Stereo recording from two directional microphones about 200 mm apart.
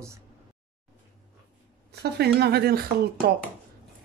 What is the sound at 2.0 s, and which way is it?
Speech, 55° right (ahead or behind).